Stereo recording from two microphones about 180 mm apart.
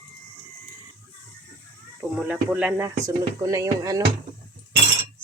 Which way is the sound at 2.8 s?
20° right (ahead or behind).